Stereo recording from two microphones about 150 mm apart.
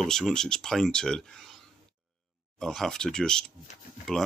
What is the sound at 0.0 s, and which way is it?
Speech, 5° left (ahead or behind).